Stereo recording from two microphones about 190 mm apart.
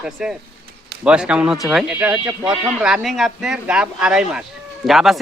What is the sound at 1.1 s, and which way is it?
A man's voice, 5° right (ahead or behind).